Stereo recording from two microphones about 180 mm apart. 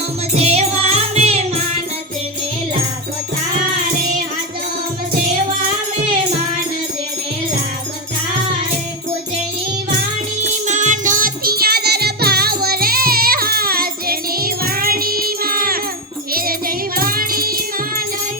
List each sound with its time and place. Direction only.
0.3 s music: 35° right (ahead or behind)
10.4 s music: 45° right (ahead or behind)